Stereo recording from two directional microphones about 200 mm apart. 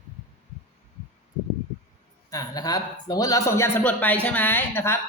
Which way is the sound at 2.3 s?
20° left (ahead or behind).